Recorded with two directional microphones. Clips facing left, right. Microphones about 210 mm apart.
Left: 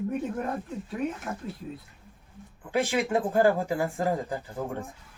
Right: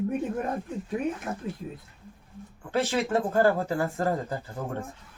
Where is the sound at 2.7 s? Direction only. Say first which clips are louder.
Even; 15° left (ahead or behind).